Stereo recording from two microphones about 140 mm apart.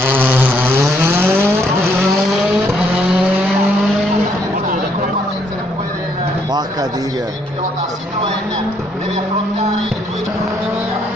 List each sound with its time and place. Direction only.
0.0 s vehicle: 15° right (ahead or behind)